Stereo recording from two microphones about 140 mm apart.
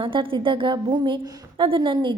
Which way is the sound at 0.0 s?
40° right (ahead or behind).